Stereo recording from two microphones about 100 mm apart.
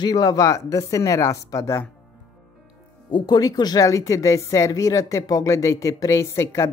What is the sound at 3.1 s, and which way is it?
A woman's voice, 45° left (ahead or behind).